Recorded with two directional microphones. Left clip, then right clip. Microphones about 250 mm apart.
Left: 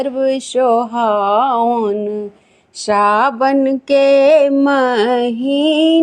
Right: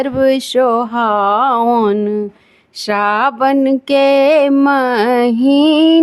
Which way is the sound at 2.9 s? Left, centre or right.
Centre.